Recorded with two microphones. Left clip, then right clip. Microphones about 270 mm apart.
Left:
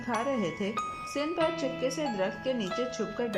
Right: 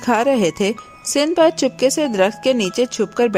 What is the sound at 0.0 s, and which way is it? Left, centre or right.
Speech, right.